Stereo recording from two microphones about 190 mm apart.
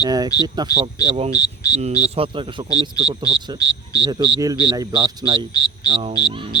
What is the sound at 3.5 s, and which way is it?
Speech, 20° left (ahead or behind).